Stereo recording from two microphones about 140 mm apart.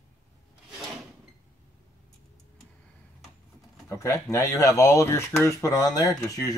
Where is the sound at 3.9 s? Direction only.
20° left (ahead or behind).